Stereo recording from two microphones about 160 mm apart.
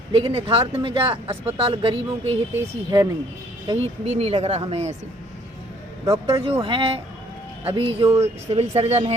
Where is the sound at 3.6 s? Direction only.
40° right (ahead or behind).